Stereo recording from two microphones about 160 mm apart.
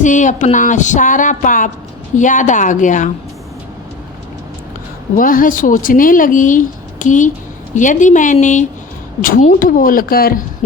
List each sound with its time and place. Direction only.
0.0 s speech: 50° left (ahead or behind)
5.1 s speech: 60° left (ahead or behind)